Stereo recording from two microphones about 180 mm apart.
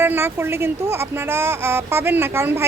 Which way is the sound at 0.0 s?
10° right (ahead or behind).